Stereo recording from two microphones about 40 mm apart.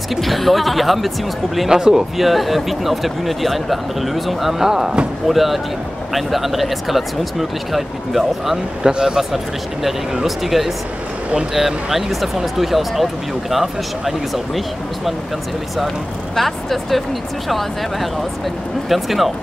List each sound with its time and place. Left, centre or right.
0.1 s speech: centre
1.7 s speech: centre
2.1 s speech: centre
5.3 s speech: centre
8.8 s speech: centre
10.2 s speech: centre
16.3 s speech: centre
18.9 s speech: centre